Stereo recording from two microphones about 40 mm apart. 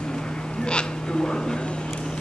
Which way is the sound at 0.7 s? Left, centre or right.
Left.